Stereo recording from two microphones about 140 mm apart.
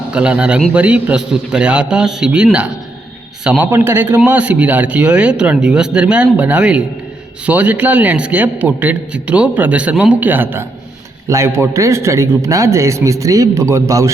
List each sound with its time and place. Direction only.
0.1 s a man's voice: 10° right (ahead or behind)